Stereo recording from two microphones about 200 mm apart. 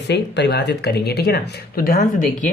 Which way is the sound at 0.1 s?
60° left (ahead or behind).